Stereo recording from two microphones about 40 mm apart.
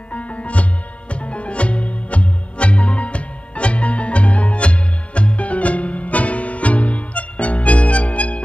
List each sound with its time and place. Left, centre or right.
0.1 s music: left